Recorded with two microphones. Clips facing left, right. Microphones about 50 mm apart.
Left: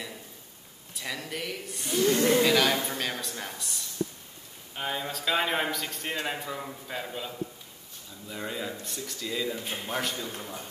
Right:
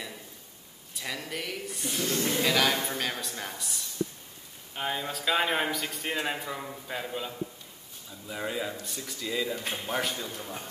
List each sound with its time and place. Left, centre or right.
0.9 s a man's voice: centre
2.1 s speech: left
2.4 s a man's voice: centre